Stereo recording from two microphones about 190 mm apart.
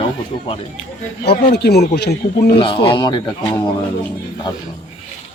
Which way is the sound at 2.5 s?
25° left (ahead or behind).